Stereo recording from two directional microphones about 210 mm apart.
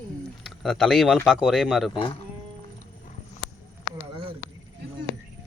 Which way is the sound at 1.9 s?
25° left (ahead or behind).